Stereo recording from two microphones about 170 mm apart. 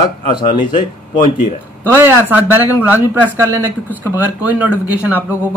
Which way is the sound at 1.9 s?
10° right (ahead or behind).